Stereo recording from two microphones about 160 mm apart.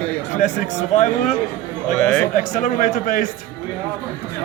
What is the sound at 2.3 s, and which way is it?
Speech, 55° left (ahead or behind).